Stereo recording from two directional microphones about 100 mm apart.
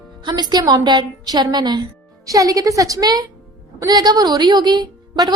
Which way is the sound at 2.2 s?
35° right (ahead or behind).